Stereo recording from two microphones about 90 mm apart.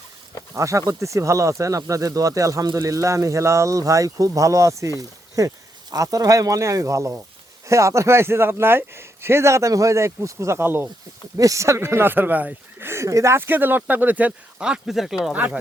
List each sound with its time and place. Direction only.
0.5 s speech: 35° right (ahead or behind)
11.3 s speech: 35° right (ahead or behind); by 12.9 s 20° right (ahead or behind)
12.9 s speech: 35° right (ahead or behind); by 15.4 s 5° right (ahead or behind)